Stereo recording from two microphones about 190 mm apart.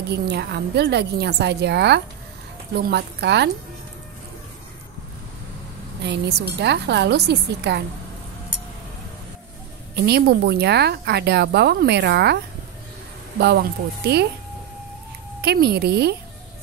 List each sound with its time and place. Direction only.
0.1 s speech: 60° right (ahead or behind)
6.0 s speech: 60° right (ahead or behind)
10.0 s speech: 55° right (ahead or behind)
13.4 s speech: 60° right (ahead or behind)
15.4 s speech: 60° right (ahead or behind)